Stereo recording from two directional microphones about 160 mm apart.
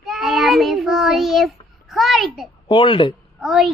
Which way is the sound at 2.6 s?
30° left (ahead or behind).